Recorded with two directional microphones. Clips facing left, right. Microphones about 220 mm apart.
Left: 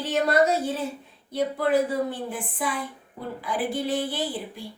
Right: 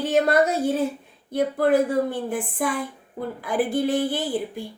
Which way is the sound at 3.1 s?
50° right (ahead or behind).